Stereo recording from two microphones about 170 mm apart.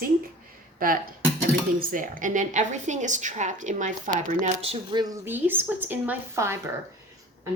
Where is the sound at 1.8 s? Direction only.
55° right (ahead or behind).